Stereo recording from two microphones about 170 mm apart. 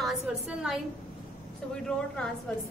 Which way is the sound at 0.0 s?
Centre (ahead or behind).